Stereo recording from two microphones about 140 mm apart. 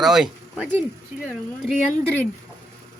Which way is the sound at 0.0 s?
5° right (ahead or behind).